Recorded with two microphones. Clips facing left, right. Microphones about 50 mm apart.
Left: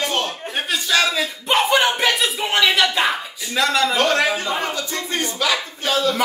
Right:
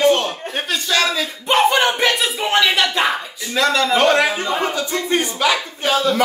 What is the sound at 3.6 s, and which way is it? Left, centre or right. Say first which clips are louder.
Speech: right 2 dB; centre.